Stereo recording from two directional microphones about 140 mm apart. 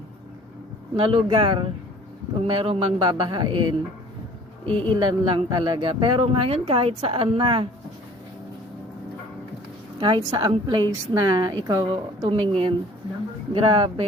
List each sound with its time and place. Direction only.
0.9 s speech: 40° right (ahead or behind)
4.9 s speech: 35° right (ahead or behind)
10.0 s speech: 35° right (ahead or behind)